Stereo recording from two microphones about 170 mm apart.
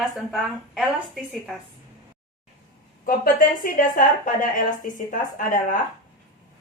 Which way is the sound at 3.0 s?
55° left (ahead or behind).